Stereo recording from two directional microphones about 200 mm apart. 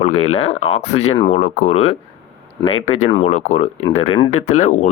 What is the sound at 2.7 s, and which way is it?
Speech, 90° left.